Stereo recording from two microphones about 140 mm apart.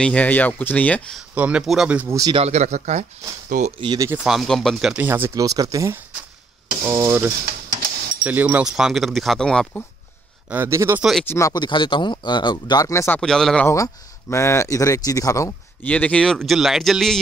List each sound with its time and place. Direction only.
0.0 s speech: 10° left (ahead or behind)
1.3 s speech: 10° right (ahead or behind)
2.3 s speech: 50° right (ahead or behind)
3.8 s speech: 30° right (ahead or behind)
4.3 s speech: centre (ahead or behind)
4.9 s speech: 15° right (ahead or behind); by 9.8 s 5° left (ahead or behind)
10.5 s speech: 20° right (ahead or behind)
11.0 s speech: centre (ahead or behind)
11.2 s speech: 25° left (ahead or behind)
13.2 s speech: 5° left (ahead or behind)
14.3 s speech: 20° left (ahead or behind)
15.9 s speech: 10° left (ahead or behind)